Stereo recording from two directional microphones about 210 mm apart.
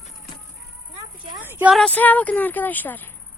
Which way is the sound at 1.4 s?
10° right (ahead or behind).